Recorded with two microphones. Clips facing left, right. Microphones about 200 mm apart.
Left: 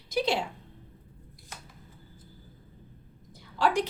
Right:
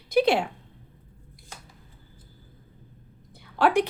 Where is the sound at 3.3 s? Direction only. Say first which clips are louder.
Right 5 dB; 60° right (ahead or behind).